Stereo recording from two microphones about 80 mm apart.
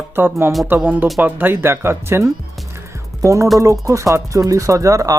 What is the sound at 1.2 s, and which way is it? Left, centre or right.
Speech, right.